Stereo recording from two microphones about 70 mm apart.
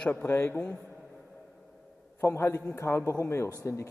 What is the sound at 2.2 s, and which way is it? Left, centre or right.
A man's voice, left.